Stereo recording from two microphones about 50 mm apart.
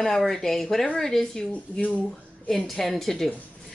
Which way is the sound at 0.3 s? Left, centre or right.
Centre.